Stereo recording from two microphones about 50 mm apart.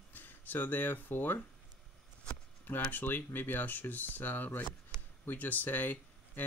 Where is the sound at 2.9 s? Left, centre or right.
Left.